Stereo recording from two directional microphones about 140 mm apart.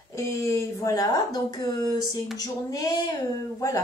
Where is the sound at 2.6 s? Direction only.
25° left (ahead or behind).